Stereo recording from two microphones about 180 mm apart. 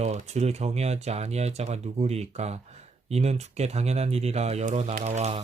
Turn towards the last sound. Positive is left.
turn(degrees=-40)  # may be behind; listen again after turning